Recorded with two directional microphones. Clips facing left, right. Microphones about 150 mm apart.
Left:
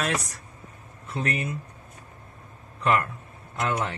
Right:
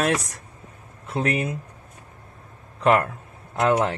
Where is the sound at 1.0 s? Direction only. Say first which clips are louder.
Right 5 dB; 70° right (ahead or behind).